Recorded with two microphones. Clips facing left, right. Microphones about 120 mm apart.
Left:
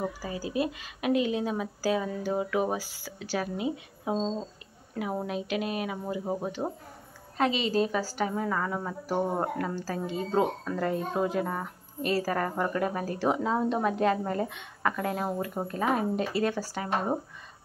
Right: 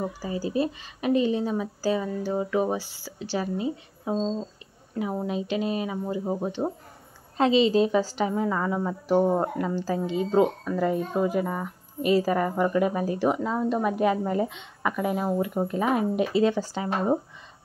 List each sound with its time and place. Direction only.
0.3 s speech: 5° left (ahead or behind)
7.3 s a woman's voice: 25° right (ahead or behind)
13.3 s speech: centre (ahead or behind)
13.8 s speech: 10° right (ahead or behind)
15.4 s speech: 15° right (ahead or behind)